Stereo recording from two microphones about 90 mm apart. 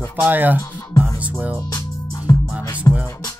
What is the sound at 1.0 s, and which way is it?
Music, 20° right (ahead or behind).